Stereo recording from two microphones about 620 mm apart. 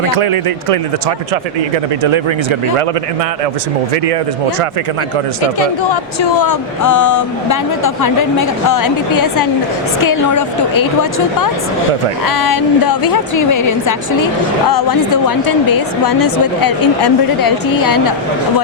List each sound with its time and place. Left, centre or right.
0.1 s speech: right
2.0 s speech: right
6.5 s speech: left
12.2 s a woman's voice: left